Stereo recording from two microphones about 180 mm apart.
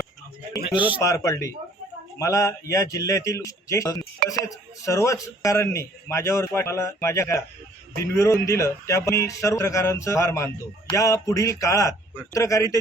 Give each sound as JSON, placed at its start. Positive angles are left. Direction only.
{"t": 1.0, "sound": "speech", "side_deg": 15}